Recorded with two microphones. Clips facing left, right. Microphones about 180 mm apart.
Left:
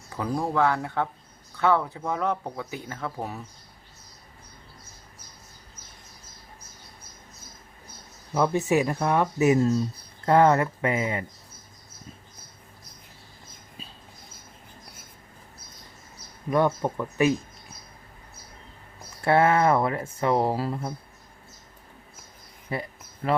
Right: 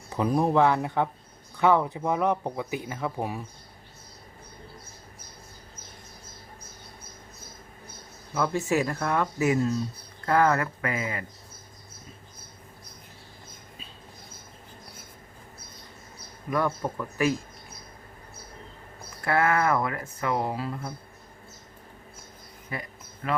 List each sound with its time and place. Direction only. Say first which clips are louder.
0.1 s speech: right 4 dB; 20° right (ahead or behind)
8.4 s speech: left 3 dB; 20° left (ahead or behind)
16.5 s speech: left 4 dB; 25° left (ahead or behind)
19.2 s speech: left 4 dB; 30° left (ahead or behind)
22.7 s a sound: left 5 dB; 30° left (ahead or behind)